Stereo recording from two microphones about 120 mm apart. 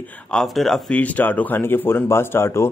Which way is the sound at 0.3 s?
5° left (ahead or behind).